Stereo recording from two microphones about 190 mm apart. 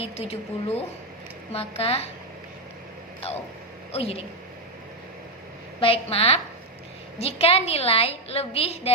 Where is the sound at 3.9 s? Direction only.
30° left (ahead or behind).